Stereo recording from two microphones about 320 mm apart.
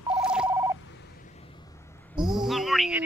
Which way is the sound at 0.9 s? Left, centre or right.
Left.